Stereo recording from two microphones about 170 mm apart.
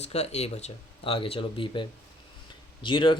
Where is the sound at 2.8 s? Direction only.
30° left (ahead or behind).